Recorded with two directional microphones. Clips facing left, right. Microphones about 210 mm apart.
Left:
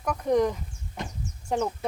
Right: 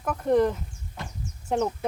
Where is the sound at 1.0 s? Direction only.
20° left (ahead or behind).